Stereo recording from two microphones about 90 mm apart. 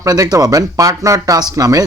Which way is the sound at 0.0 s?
40° right (ahead or behind).